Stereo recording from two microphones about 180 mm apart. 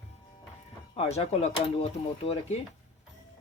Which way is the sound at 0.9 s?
35° left (ahead or behind).